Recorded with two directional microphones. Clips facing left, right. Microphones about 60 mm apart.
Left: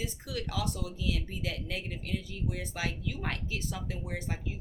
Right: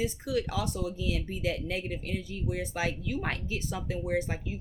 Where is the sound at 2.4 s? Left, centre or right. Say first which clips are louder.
Right 4 dB; right.